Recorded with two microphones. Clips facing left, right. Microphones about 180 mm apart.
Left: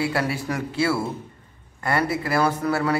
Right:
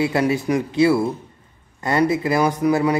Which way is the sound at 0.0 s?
20° right (ahead or behind).